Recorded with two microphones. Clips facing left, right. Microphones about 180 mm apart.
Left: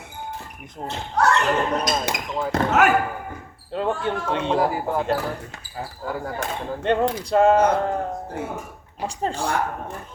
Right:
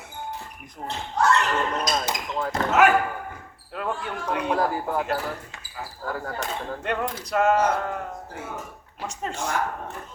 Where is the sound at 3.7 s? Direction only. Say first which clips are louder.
Left 6 dB; 25° left (ahead or behind).